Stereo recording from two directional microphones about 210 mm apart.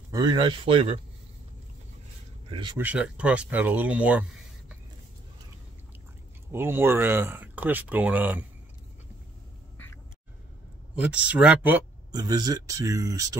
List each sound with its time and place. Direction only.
0.1 s speech: 20° right (ahead or behind)
2.4 s speech: 20° right (ahead or behind)
2.8 s speech: 5° right (ahead or behind)
6.5 s speech: 10° right (ahead or behind)
11.1 s speech: 5° right (ahead or behind)
12.1 s speech: 20° right (ahead or behind)